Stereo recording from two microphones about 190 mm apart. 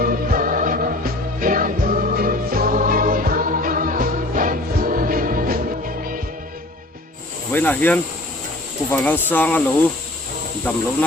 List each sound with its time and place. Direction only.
0.0 s music: 50° right (ahead or behind)
7.5 s speech: 10° left (ahead or behind)